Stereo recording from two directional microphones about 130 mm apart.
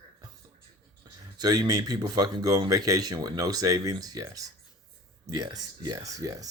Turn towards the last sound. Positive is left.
turn(degrees=-25)  # may be behind; listen again after turning